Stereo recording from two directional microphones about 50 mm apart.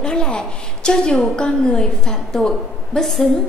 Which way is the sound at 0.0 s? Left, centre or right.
Centre.